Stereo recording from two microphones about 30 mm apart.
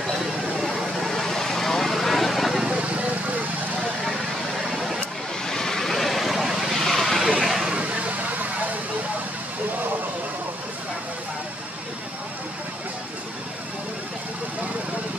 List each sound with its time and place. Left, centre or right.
0.6 s vehicle: centre
2.5 s vehicle: centre
5.5 s vehicle: centre
6.4 s vehicle: centre
6.8 s vehicle: centre
7.3 s a sound: centre
7.7 s vehicle: right